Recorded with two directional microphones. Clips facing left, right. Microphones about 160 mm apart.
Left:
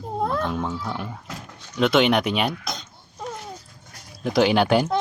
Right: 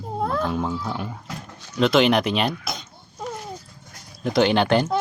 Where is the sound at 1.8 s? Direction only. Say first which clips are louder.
Right 1 dB; centre (ahead or behind).